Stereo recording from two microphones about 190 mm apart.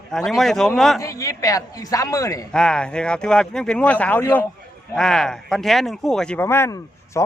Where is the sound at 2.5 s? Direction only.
5° left (ahead or behind).